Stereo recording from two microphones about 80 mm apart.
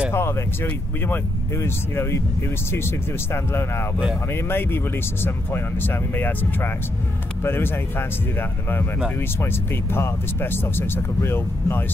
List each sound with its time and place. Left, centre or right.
0.1 s speech: left